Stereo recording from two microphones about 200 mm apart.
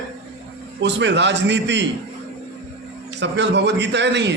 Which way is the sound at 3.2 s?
60° right (ahead or behind).